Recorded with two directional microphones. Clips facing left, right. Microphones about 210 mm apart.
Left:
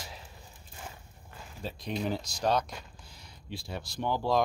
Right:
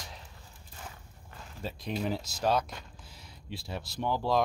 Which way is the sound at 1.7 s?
Centre (ahead or behind).